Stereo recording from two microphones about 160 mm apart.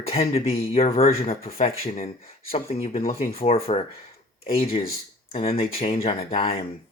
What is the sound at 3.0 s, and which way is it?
Speech, 65° left (ahead or behind).